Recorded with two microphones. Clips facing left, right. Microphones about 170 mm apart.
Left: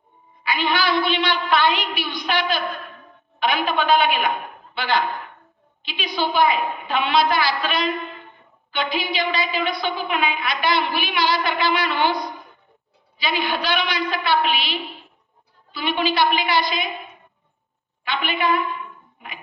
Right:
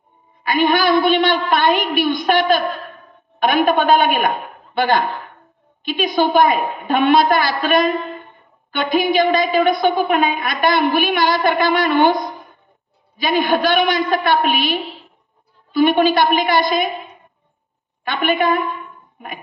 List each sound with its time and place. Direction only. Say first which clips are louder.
0.4 s a woman's voice: right 7 dB; 50° right (ahead or behind)
18.0 s a woman's voice: right 6 dB; 50° right (ahead or behind)